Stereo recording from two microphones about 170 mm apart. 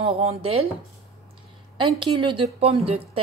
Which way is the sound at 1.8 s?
30° right (ahead or behind).